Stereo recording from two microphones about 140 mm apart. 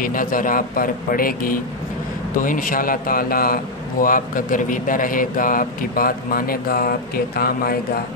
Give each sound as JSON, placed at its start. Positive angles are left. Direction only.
{"t": 0.0, "sound": "speech", "side_deg": 80}
{"t": 2.3, "sound": "speech", "side_deg": 75}